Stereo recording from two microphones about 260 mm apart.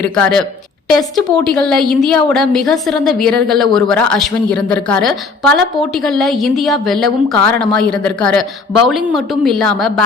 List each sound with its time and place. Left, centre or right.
0.0 s a woman's voice: centre